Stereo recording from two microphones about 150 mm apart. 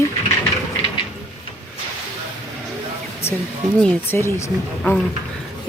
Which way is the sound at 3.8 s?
15° left (ahead or behind).